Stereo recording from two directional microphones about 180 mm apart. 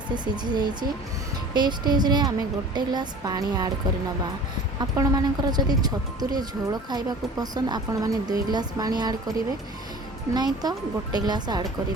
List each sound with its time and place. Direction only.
0.1 s speech: 25° right (ahead or behind)
4.8 s speech: 20° right (ahead or behind)
10.3 s speech: 20° right (ahead or behind)